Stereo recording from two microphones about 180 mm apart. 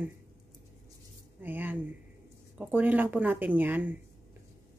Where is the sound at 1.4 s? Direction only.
10° right (ahead or behind).